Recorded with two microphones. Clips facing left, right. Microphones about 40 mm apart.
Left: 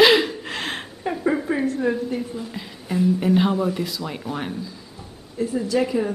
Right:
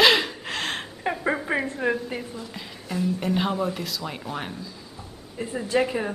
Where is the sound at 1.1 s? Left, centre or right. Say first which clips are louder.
Left 3 dB; right.